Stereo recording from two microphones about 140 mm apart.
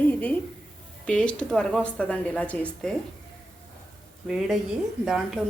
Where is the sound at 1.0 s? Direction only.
10° left (ahead or behind).